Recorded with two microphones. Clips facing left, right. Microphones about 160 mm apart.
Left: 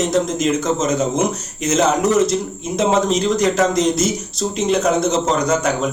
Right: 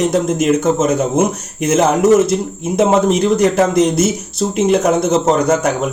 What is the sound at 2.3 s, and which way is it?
Speech, 60° right (ahead or behind).